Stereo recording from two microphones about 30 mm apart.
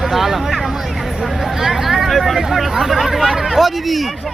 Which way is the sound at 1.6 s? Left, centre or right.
Centre.